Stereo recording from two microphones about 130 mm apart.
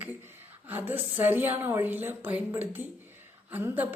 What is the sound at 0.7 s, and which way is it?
A woman's voice, 15° right (ahead or behind).